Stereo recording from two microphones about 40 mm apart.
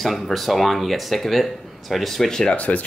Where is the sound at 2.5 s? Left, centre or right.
Left.